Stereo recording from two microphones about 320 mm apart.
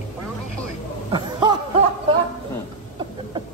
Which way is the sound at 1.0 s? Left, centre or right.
Centre.